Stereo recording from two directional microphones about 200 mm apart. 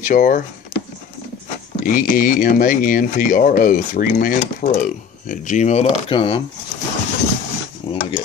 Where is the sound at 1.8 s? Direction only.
40° left (ahead or behind); by 6.4 s 25° left (ahead or behind).